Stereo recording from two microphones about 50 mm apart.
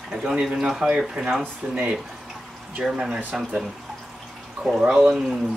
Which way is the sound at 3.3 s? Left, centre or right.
Centre.